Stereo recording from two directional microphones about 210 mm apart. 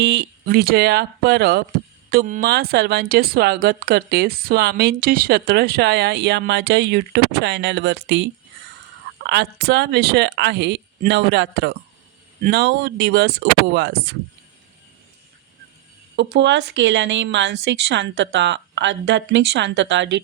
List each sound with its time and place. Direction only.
0.0 s speech: 55° right (ahead or behind)
16.1 s speech: 55° right (ahead or behind)